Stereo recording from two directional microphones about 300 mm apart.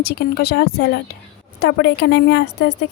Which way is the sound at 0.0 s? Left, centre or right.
Left.